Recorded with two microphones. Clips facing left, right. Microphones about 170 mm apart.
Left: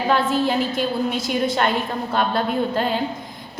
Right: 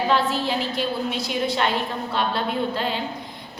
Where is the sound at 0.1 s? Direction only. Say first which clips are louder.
Left 6 dB; 50° left (ahead or behind).